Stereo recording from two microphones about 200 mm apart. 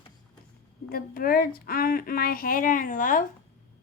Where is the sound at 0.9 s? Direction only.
45° left (ahead or behind).